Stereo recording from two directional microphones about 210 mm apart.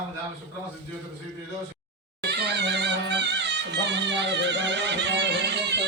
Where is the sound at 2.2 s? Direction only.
50° right (ahead or behind).